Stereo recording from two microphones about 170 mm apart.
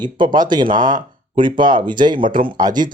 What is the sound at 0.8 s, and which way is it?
Speech, 50° right (ahead or behind).